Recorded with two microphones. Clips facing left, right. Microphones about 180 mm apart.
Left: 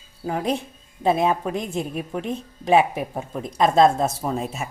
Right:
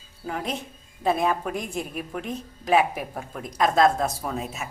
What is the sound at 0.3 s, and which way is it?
A woman's voice, 30° left (ahead or behind).